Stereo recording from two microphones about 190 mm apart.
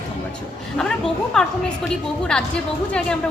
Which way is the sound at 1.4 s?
5° left (ahead or behind).